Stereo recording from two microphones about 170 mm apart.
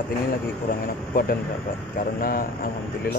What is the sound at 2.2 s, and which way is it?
Speech, 55° left (ahead or behind).